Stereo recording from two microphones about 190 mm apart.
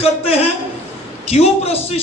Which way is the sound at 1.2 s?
30° left (ahead or behind).